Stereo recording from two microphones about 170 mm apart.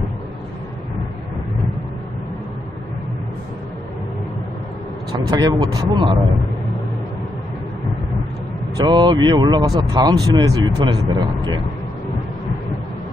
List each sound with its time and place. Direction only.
5.2 s speech: 25° right (ahead or behind)
8.7 s speech: 25° right (ahead or behind)